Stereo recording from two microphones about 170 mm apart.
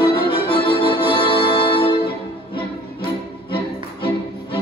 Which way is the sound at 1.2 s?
30° left (ahead or behind).